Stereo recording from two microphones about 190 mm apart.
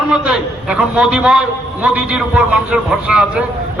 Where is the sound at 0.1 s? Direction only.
5° right (ahead or behind).